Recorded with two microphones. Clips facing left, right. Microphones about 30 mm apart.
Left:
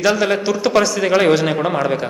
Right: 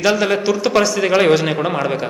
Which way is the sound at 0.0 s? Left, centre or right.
Centre.